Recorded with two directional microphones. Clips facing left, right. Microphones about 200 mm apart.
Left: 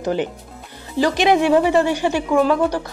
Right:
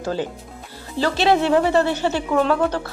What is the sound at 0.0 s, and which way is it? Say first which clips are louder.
Speech: left 3 dB; 20° left (ahead or behind).